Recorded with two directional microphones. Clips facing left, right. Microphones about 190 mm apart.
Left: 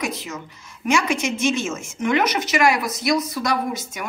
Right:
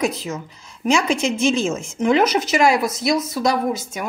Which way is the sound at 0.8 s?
30° right (ahead or behind).